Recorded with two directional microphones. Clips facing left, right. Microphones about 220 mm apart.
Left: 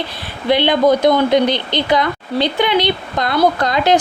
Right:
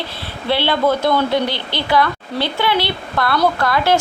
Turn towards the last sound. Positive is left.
turn(degrees=20)  # may be behind; listen again after turning